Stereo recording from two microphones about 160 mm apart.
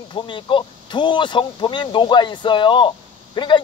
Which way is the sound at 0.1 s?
30° left (ahead or behind).